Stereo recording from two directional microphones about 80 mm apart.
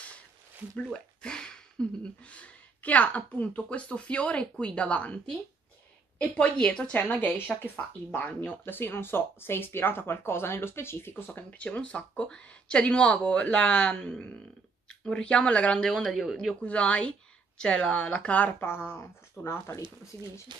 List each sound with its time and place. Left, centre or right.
0.8 s speech: centre
15.9 s speech: centre
16.6 s speech: centre; by 19.8 s left